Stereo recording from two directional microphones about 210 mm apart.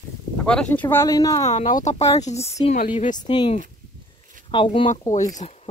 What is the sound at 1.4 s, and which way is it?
Speech, 35° left (ahead or behind).